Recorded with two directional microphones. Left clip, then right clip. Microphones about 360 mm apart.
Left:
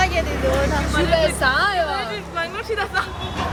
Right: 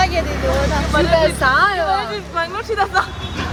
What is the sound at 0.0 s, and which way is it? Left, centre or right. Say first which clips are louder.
Vehicle: right 3 dB; centre.